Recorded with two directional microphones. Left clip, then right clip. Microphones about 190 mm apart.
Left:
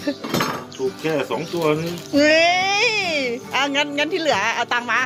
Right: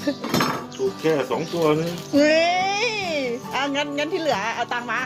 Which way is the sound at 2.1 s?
5° left (ahead or behind).